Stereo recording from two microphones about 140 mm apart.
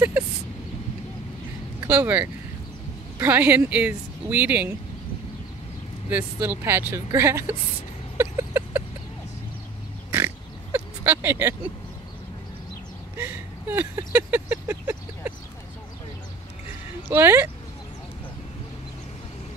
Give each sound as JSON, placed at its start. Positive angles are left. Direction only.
{"t": 1.9, "sound": "speech", "side_deg": -10}
{"t": 6.0, "sound": "speech", "side_deg": -15}
{"t": 8.2, "sound": "vehicle", "side_deg": -20}
{"t": 10.1, "sound": "pig", "side_deg": -15}
{"t": 13.2, "sound": "vehicle", "side_deg": -15}
{"t": 17.1, "sound": "speech", "side_deg": -15}